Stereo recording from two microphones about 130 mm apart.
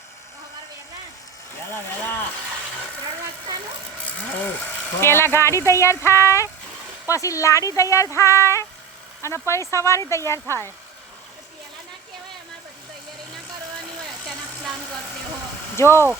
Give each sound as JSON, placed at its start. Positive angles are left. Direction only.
{"t": 1.7, "sound": "speech", "side_deg": 15}
{"t": 4.6, "sound": "speech", "side_deg": 20}
{"t": 15.7, "sound": "speech", "side_deg": 20}